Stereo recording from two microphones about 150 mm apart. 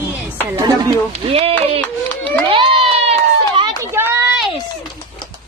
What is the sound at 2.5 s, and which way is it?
Cat, 35° right (ahead or behind).